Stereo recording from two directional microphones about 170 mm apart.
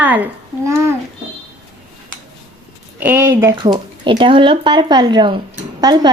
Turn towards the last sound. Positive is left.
turn(degrees=-25)  # may be behind; listen again after turning